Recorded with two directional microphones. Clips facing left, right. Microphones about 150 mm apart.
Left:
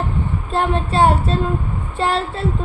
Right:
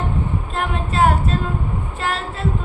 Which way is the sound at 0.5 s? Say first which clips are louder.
Left 6 dB; 30° left (ahead or behind).